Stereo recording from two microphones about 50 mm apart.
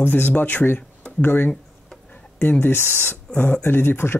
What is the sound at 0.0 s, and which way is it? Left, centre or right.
Speech, left.